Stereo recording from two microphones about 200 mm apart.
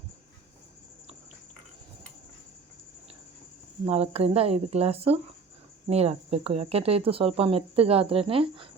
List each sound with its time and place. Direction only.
3.8 s speech: 30° right (ahead or behind)